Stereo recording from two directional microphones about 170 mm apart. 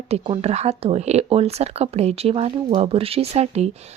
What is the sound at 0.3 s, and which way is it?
Speech, 40° right (ahead or behind).